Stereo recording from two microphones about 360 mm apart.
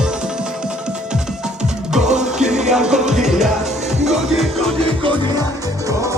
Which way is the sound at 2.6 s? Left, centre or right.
Centre.